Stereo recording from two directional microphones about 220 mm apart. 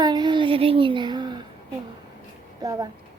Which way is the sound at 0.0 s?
20° right (ahead or behind).